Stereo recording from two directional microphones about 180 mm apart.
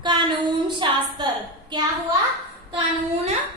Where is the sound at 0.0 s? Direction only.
25° right (ahead or behind).